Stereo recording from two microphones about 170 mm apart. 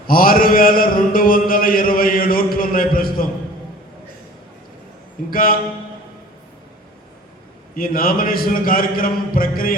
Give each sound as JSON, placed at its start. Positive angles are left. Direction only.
{"t": 0.1, "sound": "a sound", "side_deg": 60}
{"t": 5.3, "sound": "a man's voice", "side_deg": 55}
{"t": 7.8, "sound": "a man's voice", "side_deg": 55}